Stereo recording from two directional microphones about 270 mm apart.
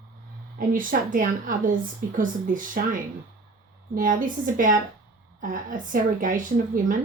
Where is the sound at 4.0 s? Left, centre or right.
Right.